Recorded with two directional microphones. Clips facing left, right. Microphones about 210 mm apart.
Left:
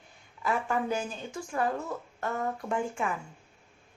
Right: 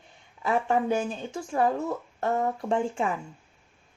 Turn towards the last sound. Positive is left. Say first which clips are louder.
# right 4 dB
turn(degrees=-30)  # may be behind; listen again after turning